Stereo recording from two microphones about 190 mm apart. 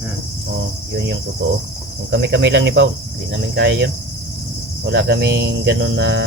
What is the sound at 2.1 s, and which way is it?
Speech, 70° right (ahead or behind).